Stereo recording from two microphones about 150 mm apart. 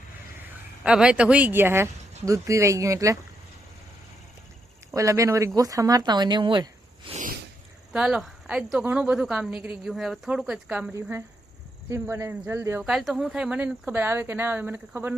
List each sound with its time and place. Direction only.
0.9 s speech: 5° right (ahead or behind)
4.9 s speech: 20° right (ahead or behind)
7.9 s speech: 5° right (ahead or behind)
11.9 s speech: 15° right (ahead or behind)
12.8 s speech: centre (ahead or behind)